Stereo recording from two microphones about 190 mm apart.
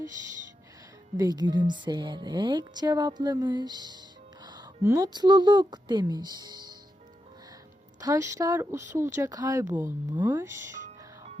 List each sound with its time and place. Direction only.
1.1 s a woman's voice: 20° right (ahead or behind)
8.0 s speech: 15° right (ahead or behind)
10.7 s music: 40° right (ahead or behind)